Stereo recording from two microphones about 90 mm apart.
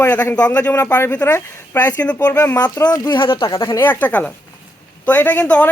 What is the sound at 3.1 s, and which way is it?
Speech, 70° left (ahead or behind).